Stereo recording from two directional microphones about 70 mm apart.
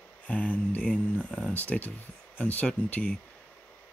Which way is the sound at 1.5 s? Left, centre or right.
Left.